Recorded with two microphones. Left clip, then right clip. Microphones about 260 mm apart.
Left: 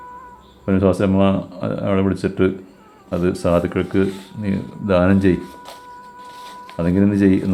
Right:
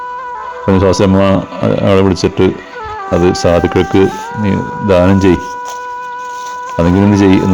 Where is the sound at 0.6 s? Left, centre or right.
Right.